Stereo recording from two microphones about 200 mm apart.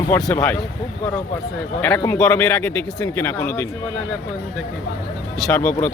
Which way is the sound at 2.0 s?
10° left (ahead or behind).